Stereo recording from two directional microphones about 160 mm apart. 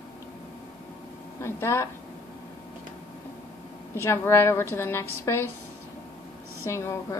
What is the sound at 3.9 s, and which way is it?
A woman's voice, 15° left (ahead or behind).